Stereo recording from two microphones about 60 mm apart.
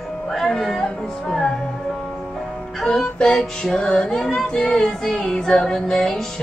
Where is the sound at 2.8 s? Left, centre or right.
Centre.